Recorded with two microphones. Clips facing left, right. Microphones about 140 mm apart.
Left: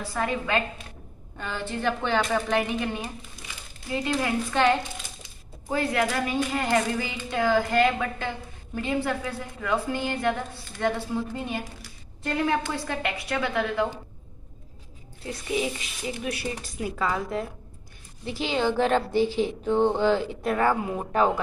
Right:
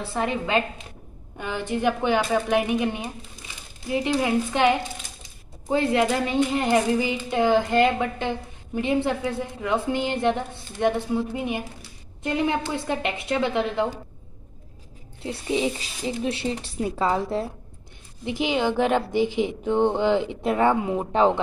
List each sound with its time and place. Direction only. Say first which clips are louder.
0.0 s a woman's voice: right 2 dB; 25° right (ahead or behind)
15.2 s speech: right 3 dB; 25° right (ahead or behind)
18.2 s a woman's voice: right 2 dB; 15° right (ahead or behind)